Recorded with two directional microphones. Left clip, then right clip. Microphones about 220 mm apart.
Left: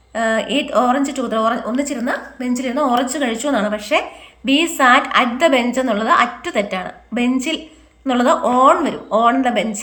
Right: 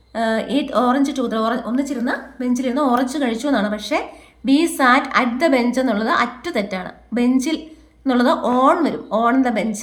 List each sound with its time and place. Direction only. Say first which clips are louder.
0.1 s a woman's voice: left 2 dB; 25° right (ahead or behind)